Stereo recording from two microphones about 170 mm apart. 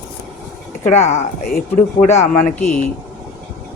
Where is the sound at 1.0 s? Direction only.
45° left (ahead or behind).